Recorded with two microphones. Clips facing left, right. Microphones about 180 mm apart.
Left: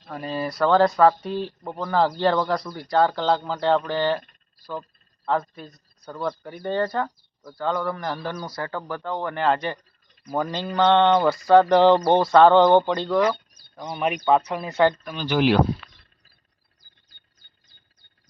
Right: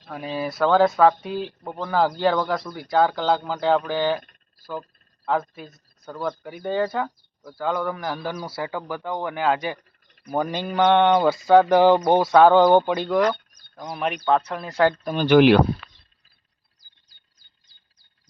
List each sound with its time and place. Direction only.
0.0 s speech: 5° right (ahead or behind)
10.2 s speech: 15° right (ahead or behind); by 14.8 s 5° left (ahead or behind)
15.0 s speech: 55° right (ahead or behind)